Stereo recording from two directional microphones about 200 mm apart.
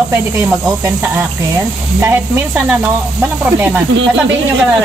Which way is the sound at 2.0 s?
10° right (ahead or behind).